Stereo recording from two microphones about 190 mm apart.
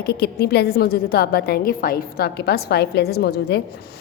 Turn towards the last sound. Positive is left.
turn(degrees=60)  # may be behind; listen again after turning